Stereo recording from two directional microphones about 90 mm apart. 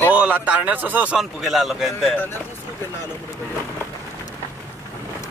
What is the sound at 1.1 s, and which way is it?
A man's voice, centre (ahead or behind).